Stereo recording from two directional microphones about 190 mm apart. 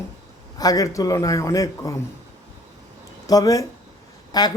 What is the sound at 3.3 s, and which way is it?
A man's voice, 20° left (ahead or behind).